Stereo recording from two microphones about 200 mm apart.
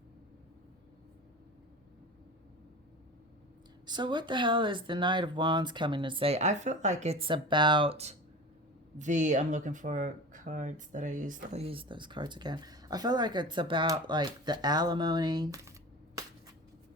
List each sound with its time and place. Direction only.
3.8 s speech: 20° right (ahead or behind)